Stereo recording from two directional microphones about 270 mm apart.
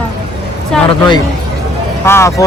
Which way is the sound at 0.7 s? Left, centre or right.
Centre.